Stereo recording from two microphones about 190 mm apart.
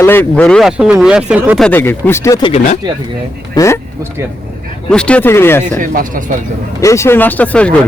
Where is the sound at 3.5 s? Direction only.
15° left (ahead or behind).